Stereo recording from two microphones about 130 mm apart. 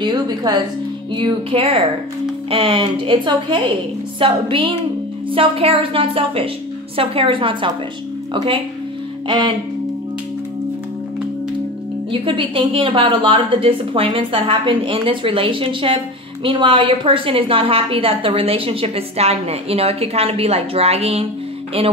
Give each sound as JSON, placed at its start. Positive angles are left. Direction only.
{"t": 0.0, "sound": "a woman's voice", "side_deg": -30}
{"t": 12.1, "sound": "a woman's voice", "side_deg": -40}